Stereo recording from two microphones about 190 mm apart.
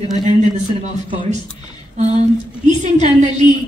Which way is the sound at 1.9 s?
35° right (ahead or behind).